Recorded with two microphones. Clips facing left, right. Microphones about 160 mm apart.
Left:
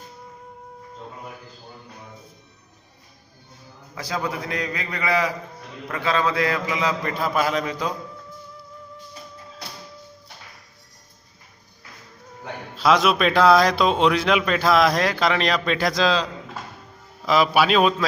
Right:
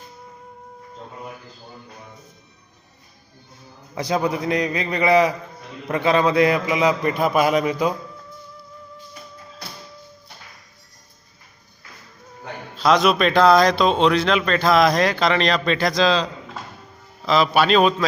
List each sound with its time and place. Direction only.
3.9 s a man's voice: 20° right (ahead or behind)
12.7 s a man's voice: 5° left (ahead or behind)